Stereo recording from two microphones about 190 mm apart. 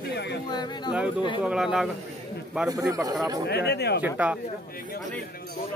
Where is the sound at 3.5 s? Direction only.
60° left (ahead or behind).